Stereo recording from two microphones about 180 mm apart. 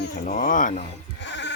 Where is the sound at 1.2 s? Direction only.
75° left (ahead or behind).